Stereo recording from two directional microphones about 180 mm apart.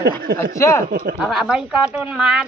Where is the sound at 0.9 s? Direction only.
55° right (ahead or behind).